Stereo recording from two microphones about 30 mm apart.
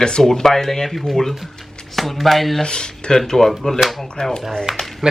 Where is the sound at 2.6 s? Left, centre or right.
Left.